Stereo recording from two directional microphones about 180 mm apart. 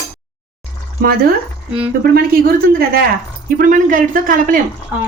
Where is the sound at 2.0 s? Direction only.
55° right (ahead or behind).